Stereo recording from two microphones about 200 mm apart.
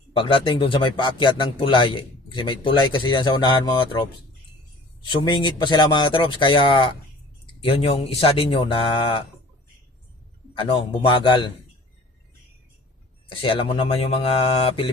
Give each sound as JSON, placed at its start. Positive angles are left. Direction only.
{"t": 0.2, "sound": "speech", "side_deg": 25}
{"t": 10.5, "sound": "speech", "side_deg": 25}
{"t": 13.4, "sound": "speech", "side_deg": 25}